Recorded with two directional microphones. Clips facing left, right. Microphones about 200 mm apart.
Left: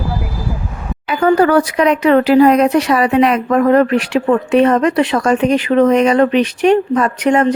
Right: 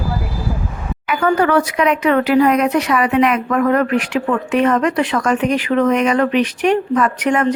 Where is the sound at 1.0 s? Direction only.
30° left (ahead or behind).